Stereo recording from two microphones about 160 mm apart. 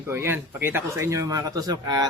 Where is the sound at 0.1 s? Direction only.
15° right (ahead or behind).